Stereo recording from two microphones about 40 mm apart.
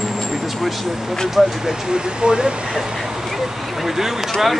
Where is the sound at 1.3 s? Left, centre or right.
Centre.